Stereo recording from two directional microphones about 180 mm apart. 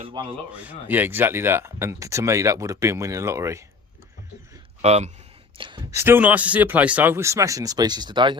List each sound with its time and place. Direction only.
0.0 s speech: 25° right (ahead or behind)
0.5 s speech: 10° right (ahead or behind)
4.8 s speech: 35° right (ahead or behind)
5.5 s speech: 25° right (ahead or behind)
6.0 s speech: 10° right (ahead or behind); by 8.4 s 25° right (ahead or behind)